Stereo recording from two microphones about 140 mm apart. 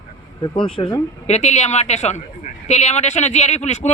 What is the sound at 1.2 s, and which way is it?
Speech, 55° left (ahead or behind).